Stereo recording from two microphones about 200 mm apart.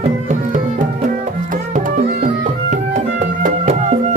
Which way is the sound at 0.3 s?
40° right (ahead or behind).